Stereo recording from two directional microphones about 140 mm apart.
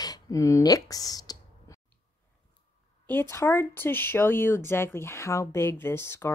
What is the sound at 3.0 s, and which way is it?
Speech, 15° left (ahead or behind).